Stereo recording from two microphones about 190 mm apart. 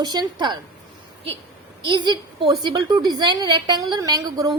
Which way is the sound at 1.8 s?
25° right (ahead or behind).